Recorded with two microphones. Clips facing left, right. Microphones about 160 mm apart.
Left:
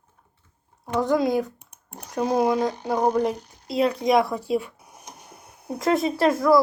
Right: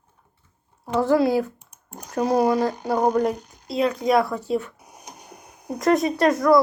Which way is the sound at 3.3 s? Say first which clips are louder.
Right 1 dB; 10° right (ahead or behind).